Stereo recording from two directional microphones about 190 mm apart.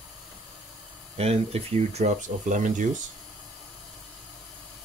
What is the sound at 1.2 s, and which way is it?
Speech, 35° right (ahead or behind).